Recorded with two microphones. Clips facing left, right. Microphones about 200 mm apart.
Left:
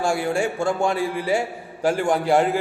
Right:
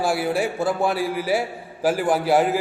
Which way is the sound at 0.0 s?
5° right (ahead or behind).